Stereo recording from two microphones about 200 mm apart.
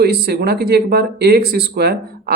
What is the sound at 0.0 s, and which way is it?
Speech, 50° right (ahead or behind).